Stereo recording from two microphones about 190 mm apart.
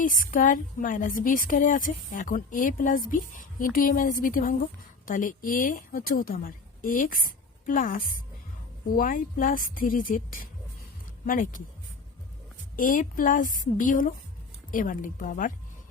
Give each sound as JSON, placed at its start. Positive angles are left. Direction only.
{"t": 0.0, "sound": "a woman's voice", "side_deg": 45}
{"t": 12.7, "sound": "a woman's voice", "side_deg": 45}